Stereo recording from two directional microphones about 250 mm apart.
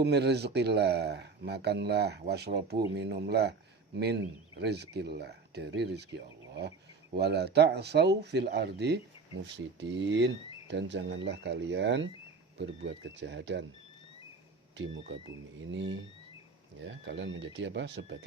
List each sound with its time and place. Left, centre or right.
0.0 s speech: right
4.6 s speech: right
6.5 s a sound: right
7.2 s speech: right
15.1 s speech: right